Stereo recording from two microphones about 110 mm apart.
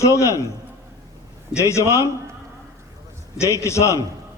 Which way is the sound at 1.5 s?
25° left (ahead or behind).